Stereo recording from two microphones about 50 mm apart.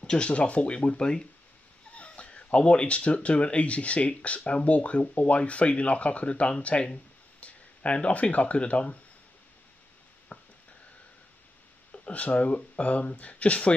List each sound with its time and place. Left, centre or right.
0.0 s speech: centre
10.3 s a sound: left
11.9 s speech: left